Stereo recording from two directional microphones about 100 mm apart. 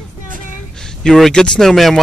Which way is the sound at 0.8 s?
5° left (ahead or behind).